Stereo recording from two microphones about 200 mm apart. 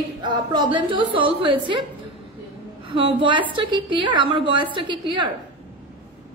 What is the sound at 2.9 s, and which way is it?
A woman's voice, 25° right (ahead or behind).